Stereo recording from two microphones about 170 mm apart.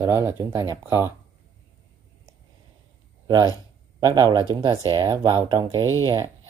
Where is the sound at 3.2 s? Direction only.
20° right (ahead or behind).